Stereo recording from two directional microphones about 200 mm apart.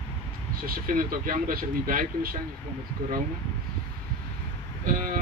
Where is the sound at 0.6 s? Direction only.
45° right (ahead or behind).